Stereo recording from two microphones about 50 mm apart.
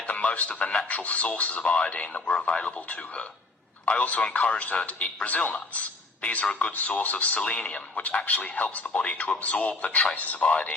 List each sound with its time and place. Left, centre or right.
0.0 s music: left
0.9 s speech: left